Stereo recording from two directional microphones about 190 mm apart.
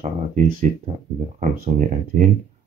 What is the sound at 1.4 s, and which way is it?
Speech, 45° right (ahead or behind).